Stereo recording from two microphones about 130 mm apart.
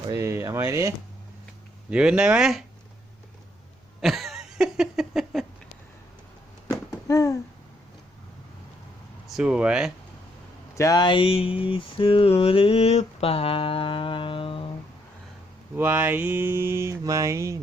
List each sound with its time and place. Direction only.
0.1 s speech: 20° right (ahead or behind)
1.9 s speech: 5° right (ahead or behind)
4.0 s a sound: centre (ahead or behind)
6.7 s a sound: 25° left (ahead or behind)
9.2 s speech: 5° right (ahead or behind)
10.8 s mantra: 30° left (ahead or behind)
15.7 s mantra: 15° right (ahead or behind)